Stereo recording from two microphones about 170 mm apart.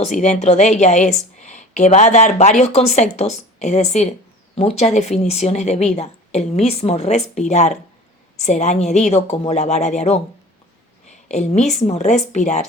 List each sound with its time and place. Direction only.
0.0 s speech: 40° left (ahead or behind)
11.3 s speech: 40° left (ahead or behind)